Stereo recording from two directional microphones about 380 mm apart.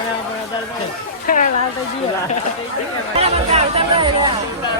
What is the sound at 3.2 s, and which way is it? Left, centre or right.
Speech, centre.